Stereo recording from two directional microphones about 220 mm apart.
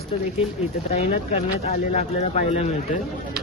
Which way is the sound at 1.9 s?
30° left (ahead or behind).